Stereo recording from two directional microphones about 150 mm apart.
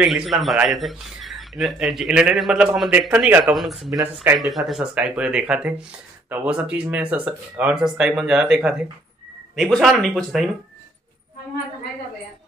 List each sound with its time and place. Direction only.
0.0 s speech: centre (ahead or behind)
3.9 s speech: 15° right (ahead or behind)
4.4 s speech: centre (ahead or behind)